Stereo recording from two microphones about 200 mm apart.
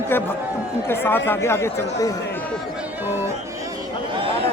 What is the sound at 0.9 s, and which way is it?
Speech, 10° left (ahead or behind).